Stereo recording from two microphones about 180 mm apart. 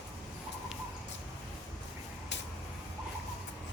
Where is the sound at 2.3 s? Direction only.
75° left (ahead or behind).